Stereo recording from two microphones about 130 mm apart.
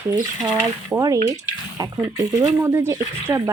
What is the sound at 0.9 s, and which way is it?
Speech, 25° right (ahead or behind).